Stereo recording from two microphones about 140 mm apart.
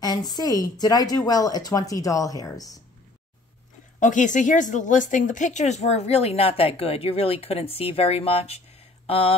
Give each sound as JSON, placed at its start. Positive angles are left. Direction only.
{"t": 0.0, "sound": "speech", "side_deg": 30}
{"t": 4.0, "sound": "speech", "side_deg": 65}